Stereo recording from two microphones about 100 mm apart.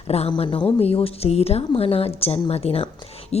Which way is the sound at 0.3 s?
55° left (ahead or behind).